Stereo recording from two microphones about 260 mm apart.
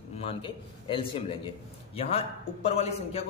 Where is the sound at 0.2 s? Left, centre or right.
Left.